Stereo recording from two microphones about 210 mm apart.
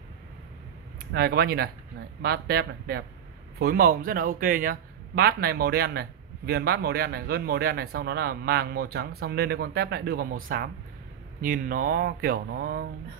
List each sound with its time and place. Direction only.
1.1 s speech: 50° right (ahead or behind)